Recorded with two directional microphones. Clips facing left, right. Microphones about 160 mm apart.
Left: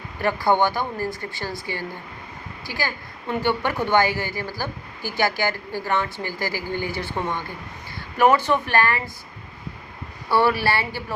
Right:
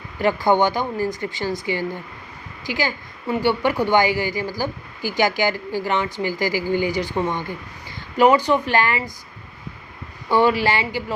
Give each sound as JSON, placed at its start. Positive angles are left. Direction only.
{"t": 0.2, "sound": "a woman's voice", "side_deg": -20}
{"t": 10.2, "sound": "a woman's voice", "side_deg": -15}